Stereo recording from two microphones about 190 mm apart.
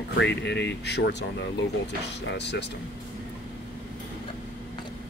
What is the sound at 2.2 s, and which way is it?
Speech, 65° left (ahead or behind).